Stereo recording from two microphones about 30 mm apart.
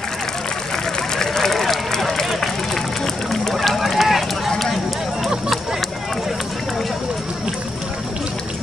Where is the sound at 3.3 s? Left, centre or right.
Centre.